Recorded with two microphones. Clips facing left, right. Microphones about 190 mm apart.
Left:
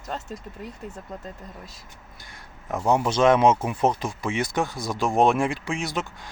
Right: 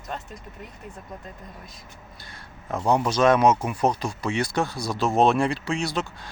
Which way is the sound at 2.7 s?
15° left (ahead or behind).